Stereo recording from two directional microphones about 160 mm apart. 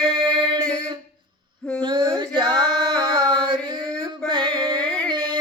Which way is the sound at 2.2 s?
30° right (ahead or behind).